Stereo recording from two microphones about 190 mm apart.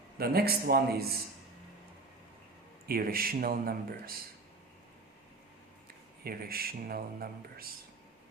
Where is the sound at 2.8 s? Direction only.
50° right (ahead or behind).